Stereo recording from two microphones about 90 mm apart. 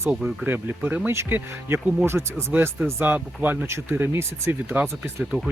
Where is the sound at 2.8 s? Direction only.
30° right (ahead or behind).